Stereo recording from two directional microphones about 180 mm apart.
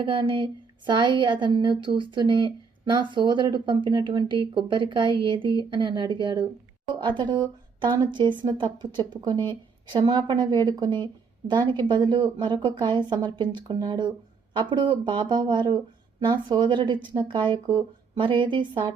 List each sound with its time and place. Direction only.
0.0 s speech: 30° right (ahead or behind)